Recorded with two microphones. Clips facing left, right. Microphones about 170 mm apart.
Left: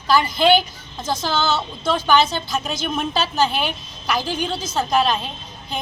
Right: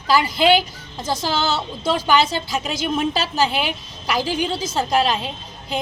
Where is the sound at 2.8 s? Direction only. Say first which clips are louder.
Right 3 dB; 5° right (ahead or behind).